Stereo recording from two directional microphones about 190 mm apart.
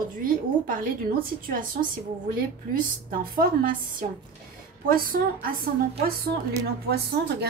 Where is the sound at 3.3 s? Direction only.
50° right (ahead or behind).